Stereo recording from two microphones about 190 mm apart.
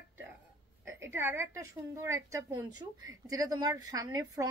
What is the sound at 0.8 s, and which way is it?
A woman's voice, 10° right (ahead or behind).